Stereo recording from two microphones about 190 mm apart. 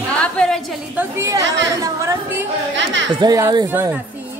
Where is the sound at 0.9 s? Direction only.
15° right (ahead or behind).